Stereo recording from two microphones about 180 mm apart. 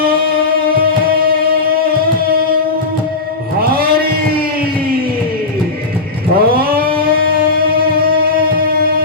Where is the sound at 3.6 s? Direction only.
55° right (ahead or behind).